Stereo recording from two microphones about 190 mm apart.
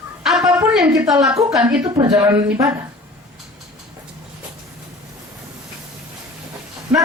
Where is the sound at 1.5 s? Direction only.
5° right (ahead or behind).